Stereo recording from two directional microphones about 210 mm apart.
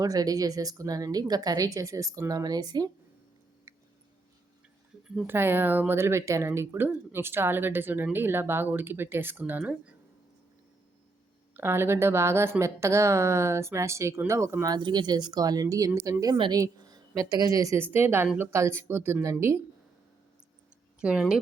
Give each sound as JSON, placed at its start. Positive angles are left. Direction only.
{"t": 0.0, "sound": "a woman's voice", "side_deg": -15}
{"t": 3.7, "sound": "a sound", "side_deg": -15}
{"t": 5.0, "sound": "a woman's voice", "side_deg": -5}
{"t": 11.5, "sound": "a woman's voice", "side_deg": -10}
{"t": 21.0, "sound": "speech", "side_deg": -5}